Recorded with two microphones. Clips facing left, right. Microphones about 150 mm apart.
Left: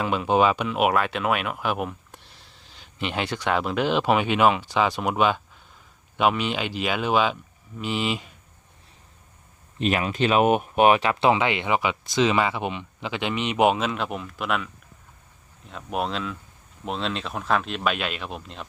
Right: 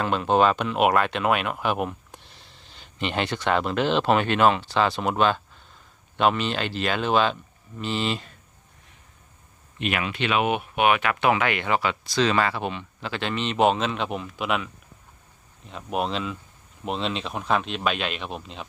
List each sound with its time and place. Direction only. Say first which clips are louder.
0.0 s speech: even; 5° left (ahead or behind)
9.7 s speech: left 4 dB; 35° left (ahead or behind); by 18.6 s centre (ahead or behind)